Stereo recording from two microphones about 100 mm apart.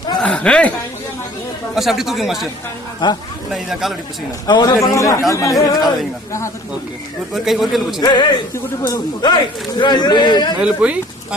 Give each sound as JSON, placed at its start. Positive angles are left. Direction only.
{"t": 0.2, "sound": "chuckle", "side_deg": 10}
{"t": 1.7, "sound": "speech", "side_deg": -5}
{"t": 3.0, "sound": "a man's voice", "side_deg": 50}
{"t": 3.5, "sound": "speech", "side_deg": -5}
{"t": 4.4, "sound": "a man's voice", "side_deg": 45}
{"t": 5.5, "sound": "speech", "side_deg": 0}
{"t": 7.3, "sound": "speech", "side_deg": 0}
{"t": 8.0, "sound": "a man's voice", "side_deg": 50}
{"t": 10.6, "sound": "speech", "side_deg": -15}